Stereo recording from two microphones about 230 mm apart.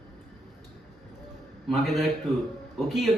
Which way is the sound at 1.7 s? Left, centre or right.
Centre.